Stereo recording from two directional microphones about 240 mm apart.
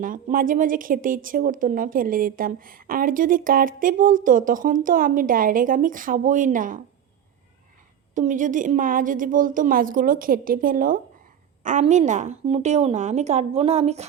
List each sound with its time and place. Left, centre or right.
0.0 s speech: right
8.1 s a woman's voice: right